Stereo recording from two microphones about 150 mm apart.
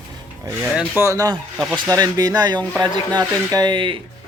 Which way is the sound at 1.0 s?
20° right (ahead or behind).